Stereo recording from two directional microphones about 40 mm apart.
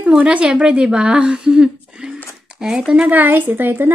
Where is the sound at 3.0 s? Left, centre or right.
Right.